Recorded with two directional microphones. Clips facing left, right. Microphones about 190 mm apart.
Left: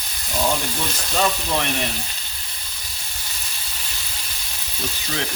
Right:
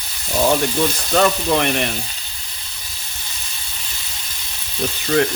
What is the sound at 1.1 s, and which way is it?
Frying, 60° right (ahead or behind).